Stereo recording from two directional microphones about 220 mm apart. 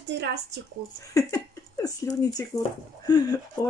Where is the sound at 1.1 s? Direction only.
15° left (ahead or behind).